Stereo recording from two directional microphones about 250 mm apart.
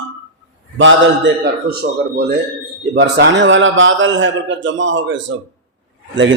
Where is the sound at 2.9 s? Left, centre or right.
Right.